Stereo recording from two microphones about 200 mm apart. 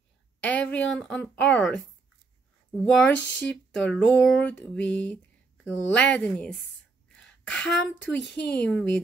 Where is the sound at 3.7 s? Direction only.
5° left (ahead or behind).